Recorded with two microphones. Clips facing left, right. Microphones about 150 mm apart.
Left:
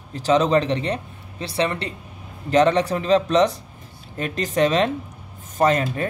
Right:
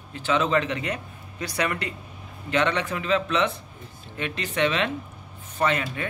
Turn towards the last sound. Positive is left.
turn(degrees=40)  # may be behind; listen again after turning